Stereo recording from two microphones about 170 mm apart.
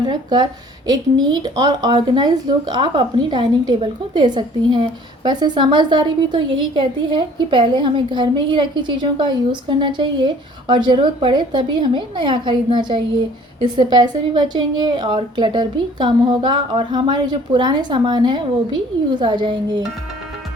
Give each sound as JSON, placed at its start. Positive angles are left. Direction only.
{"t": 0.0, "sound": "a woman's voice", "side_deg": -25}